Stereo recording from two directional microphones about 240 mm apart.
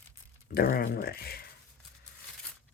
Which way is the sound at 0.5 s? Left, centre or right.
Left.